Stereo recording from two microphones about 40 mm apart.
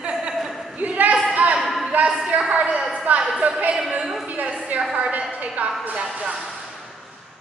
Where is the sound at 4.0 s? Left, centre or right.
Centre.